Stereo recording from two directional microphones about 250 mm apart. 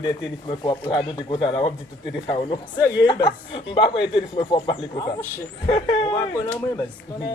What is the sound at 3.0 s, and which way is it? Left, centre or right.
Speech, centre.